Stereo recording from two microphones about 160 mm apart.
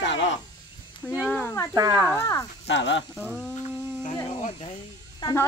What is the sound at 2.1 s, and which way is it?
Speech, 20° left (ahead or behind).